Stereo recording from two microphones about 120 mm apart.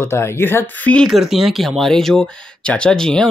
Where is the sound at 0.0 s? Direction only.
20° left (ahead or behind).